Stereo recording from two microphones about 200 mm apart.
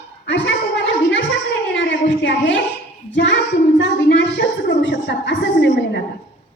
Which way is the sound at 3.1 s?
65° left (ahead or behind).